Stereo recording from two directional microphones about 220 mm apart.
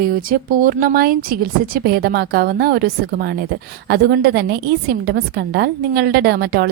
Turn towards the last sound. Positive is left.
turn(degrees=-45)  # may be behind; listen again after turning